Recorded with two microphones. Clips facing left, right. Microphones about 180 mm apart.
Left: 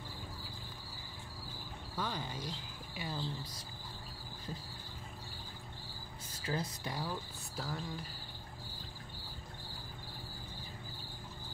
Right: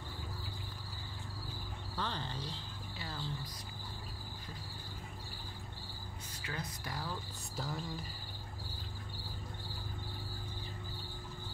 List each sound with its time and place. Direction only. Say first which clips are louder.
2.0 s speech: left 1 dB; 10° left (ahead or behind)
6.4 s speech: left 6 dB; 30° left (ahead or behind)
7.5 s cricket: even; centre (ahead or behind)